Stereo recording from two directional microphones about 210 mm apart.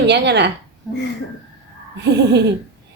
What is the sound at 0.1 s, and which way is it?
Speech, 55° right (ahead or behind).